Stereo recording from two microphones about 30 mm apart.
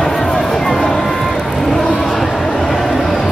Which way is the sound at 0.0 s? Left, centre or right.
Centre.